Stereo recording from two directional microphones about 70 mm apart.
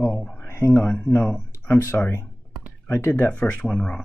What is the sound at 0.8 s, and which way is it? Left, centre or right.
Speech, centre.